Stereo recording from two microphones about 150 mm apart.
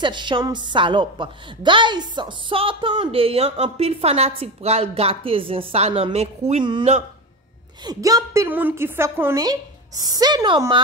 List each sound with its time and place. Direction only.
0.0 s a woman's voice: 30° right (ahead or behind)
6.6 s a woman's voice: 30° right (ahead or behind)